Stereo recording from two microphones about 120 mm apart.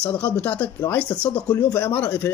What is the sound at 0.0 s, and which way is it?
Speech, 10° left (ahead or behind).